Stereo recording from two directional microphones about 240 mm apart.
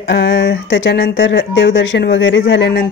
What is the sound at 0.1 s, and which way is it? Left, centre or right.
Speech, left.